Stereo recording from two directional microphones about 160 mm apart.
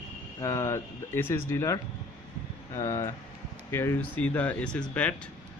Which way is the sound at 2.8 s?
15° left (ahead or behind).